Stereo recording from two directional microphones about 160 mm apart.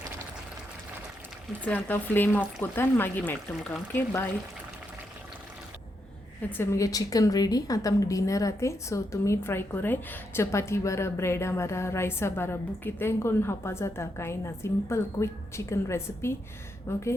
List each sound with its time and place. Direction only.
1.6 s a woman's voice: 10° left (ahead or behind)
6.6 s a woman's voice: 20° left (ahead or behind)